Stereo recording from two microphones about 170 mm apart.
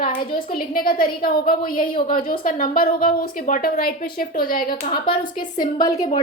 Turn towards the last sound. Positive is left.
turn(degrees=20)  # may be behind; listen again after turning